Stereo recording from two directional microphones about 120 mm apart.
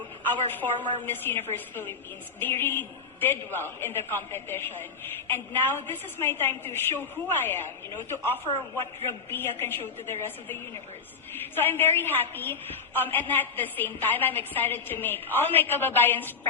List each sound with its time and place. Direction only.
0.2 s a woman's voice: 15° left (ahead or behind)